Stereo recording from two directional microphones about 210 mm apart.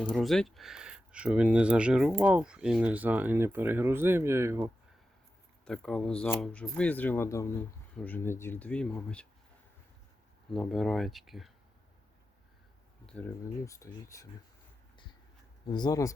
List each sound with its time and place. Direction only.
0.0 s speech: 5° left (ahead or behind)
5.6 s speech: 5° left (ahead or behind)
10.5 s speech: centre (ahead or behind)
13.1 s speech: 10° left (ahead or behind)
15.6 s speech: 20° left (ahead or behind)